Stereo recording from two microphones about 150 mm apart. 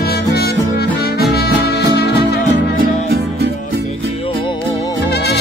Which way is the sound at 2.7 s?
90° right.